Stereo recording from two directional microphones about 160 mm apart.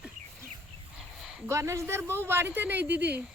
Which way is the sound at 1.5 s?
15° right (ahead or behind).